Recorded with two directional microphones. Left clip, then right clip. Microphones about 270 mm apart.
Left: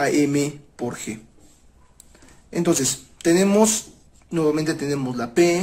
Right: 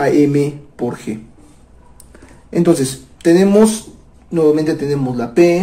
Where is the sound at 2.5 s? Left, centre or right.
Centre.